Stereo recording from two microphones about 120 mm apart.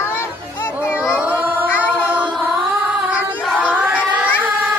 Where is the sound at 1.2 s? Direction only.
15° right (ahead or behind).